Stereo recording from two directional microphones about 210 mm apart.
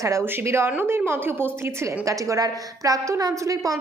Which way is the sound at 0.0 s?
15° right (ahead or behind).